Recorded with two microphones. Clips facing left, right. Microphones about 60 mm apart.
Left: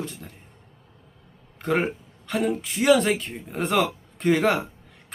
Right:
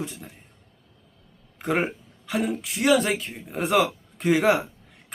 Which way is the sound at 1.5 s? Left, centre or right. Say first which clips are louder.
Left 1 dB; centre.